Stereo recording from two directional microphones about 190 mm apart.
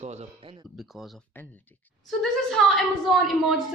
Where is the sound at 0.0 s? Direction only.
35° right (ahead or behind).